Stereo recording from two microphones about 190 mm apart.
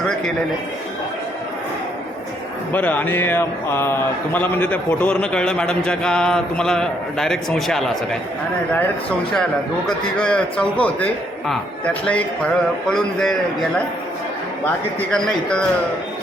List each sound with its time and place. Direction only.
2.7 s speech: 10° left (ahead or behind)
12.9 s speech: 5° left (ahead or behind)
15.1 s speech: 5° left (ahead or behind)